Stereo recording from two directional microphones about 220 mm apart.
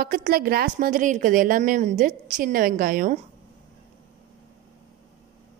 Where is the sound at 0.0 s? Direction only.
45° right (ahead or behind).